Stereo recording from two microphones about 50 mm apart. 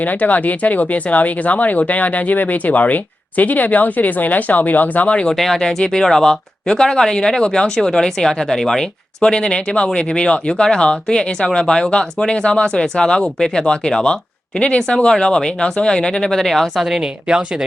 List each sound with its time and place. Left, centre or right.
0.0 s speech: left
5.3 s speech: centre
16.8 s speech: centre